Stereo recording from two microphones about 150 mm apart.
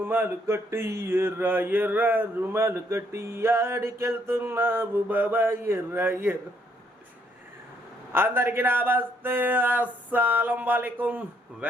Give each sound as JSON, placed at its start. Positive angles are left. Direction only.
{"t": 0.0, "sound": "mantra", "side_deg": -15}
{"t": 8.1, "sound": "mantra", "side_deg": -15}